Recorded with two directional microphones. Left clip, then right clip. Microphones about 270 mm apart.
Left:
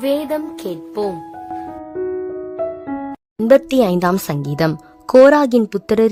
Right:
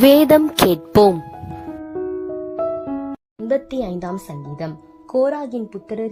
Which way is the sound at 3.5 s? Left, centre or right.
Left.